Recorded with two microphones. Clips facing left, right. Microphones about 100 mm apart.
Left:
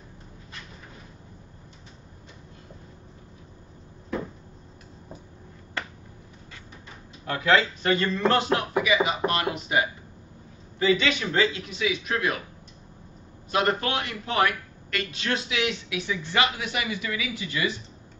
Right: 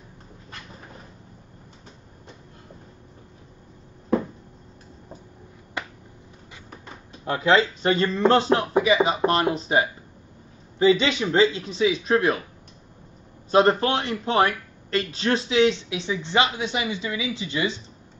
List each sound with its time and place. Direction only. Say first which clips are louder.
5.8 s finger snapping: right 1 dB; 15° right (ahead or behind)
7.2 s speech: right 3 dB; 25° right (ahead or behind)
13.5 s speech: right 6 dB; 30° right (ahead or behind)